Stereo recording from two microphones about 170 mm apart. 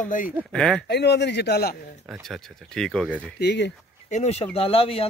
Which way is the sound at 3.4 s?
85° left.